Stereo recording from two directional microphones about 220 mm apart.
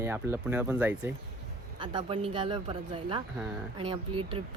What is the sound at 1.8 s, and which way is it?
Speech, 25° right (ahead or behind).